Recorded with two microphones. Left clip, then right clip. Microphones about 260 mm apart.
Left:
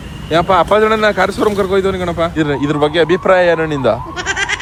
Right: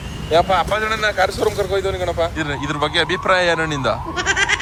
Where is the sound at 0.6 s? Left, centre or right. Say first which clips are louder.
Left 8 dB; centre.